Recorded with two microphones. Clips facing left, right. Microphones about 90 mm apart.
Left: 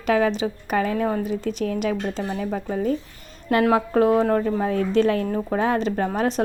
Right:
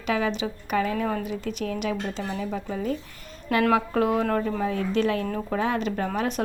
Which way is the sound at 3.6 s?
30° left (ahead or behind).